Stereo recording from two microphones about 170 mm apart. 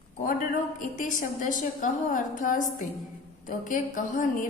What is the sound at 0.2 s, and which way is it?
A woman's voice, 50° left (ahead or behind).